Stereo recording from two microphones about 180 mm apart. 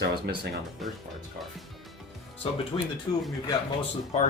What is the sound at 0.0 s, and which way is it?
Speech, 65° right (ahead or behind).